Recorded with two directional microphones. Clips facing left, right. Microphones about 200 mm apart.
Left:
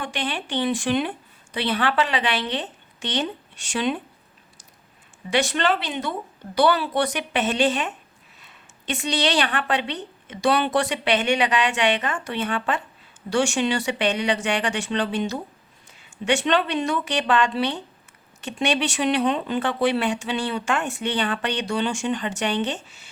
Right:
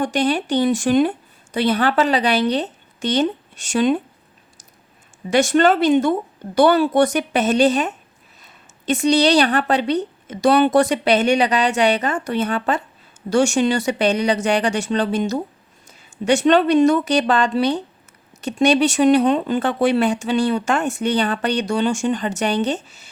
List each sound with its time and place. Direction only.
0.0 s a woman's voice: 40° right (ahead or behind)
5.3 s a woman's voice: 45° right (ahead or behind)